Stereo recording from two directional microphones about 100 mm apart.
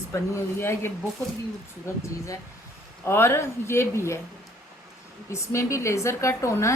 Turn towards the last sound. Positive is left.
turn(degrees=30)  # may be behind; listen again after turning